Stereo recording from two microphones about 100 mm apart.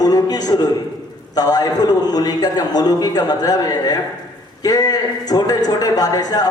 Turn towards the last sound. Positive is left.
turn(degrees=40)  # may be behind; listen again after turning